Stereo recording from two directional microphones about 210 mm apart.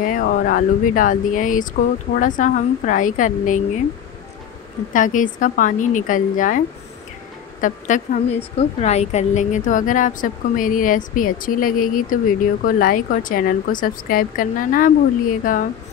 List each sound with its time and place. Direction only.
0.0 s speech: 40° left (ahead or behind)
4.9 s speech: 40° left (ahead or behind)
7.6 s speech: 35° left (ahead or behind)